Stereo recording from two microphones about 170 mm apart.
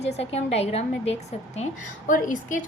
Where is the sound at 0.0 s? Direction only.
40° left (ahead or behind).